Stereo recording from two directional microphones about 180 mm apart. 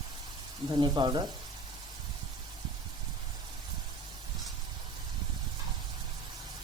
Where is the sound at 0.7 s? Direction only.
25° right (ahead or behind).